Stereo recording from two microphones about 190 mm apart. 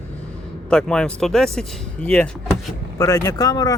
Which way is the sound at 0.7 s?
5° left (ahead or behind).